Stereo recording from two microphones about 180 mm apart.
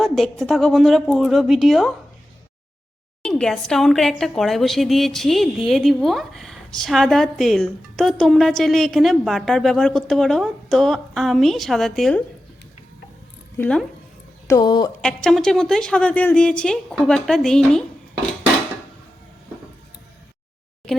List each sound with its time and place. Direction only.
0.0 s a woman's voice: centre (ahead or behind)
3.2 s a woman's voice: 5° left (ahead or behind)
13.6 s a woman's voice: 5° left (ahead or behind)
14.4 s speech: 20° left (ahead or behind)
15.0 s a woman's voice: 5° left (ahead or behind)
20.9 s speech: centre (ahead or behind)